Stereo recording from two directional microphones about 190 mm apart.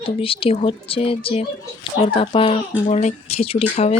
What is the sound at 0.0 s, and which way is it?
Speech, 30° left (ahead or behind).